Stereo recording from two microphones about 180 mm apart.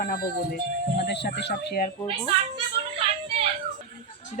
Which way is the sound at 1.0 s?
70° left (ahead or behind).